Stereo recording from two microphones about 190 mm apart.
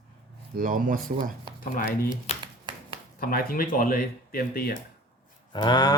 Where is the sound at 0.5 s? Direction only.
45° right (ahead or behind).